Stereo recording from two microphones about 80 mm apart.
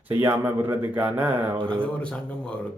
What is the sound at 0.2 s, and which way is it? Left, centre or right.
A man's voice, right.